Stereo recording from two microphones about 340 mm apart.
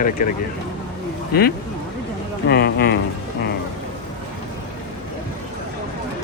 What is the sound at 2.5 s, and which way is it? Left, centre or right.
Speech, left.